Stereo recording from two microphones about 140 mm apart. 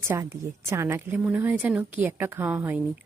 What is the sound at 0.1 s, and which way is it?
Speech, 20° right (ahead or behind).